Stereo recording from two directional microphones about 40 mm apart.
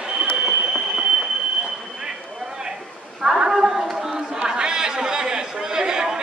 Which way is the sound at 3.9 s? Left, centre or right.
Centre.